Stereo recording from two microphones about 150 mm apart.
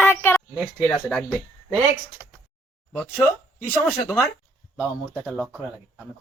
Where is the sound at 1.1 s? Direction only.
5° left (ahead or behind).